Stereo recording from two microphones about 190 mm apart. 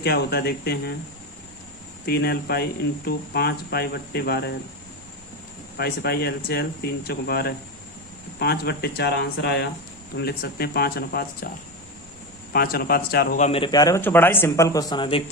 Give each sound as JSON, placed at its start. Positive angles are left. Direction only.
{"t": 0.0, "sound": "speech", "side_deg": 55}
{"t": 2.0, "sound": "speech", "side_deg": 55}
{"t": 5.7, "sound": "speech", "side_deg": 55}
{"t": 12.5, "sound": "speech", "side_deg": 50}
{"t": 13.4, "sound": "a man's voice", "side_deg": 30}